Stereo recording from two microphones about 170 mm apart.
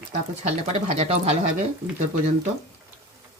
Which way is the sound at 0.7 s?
40° right (ahead or behind).